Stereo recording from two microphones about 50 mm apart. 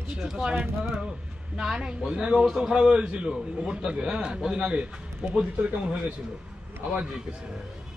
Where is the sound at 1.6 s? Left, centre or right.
Centre.